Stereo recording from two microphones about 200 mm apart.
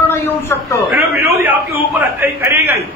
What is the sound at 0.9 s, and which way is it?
A man's voice, 10° right (ahead or behind).